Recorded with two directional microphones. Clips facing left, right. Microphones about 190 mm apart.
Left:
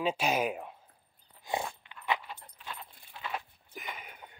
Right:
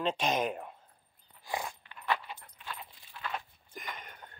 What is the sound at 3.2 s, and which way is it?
Walk, 5° left (ahead or behind).